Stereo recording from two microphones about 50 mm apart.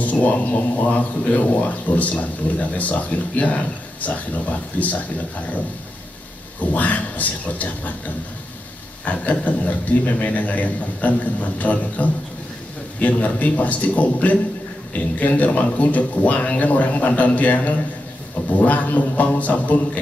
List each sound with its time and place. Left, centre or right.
0.0 s speech: left
6.6 s speech: left
9.0 s speech: left